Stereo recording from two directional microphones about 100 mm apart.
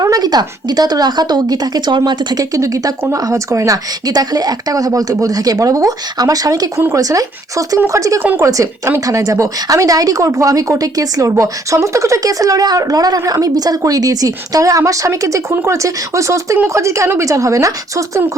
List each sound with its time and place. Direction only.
0.0 s speech: 40° right (ahead or behind)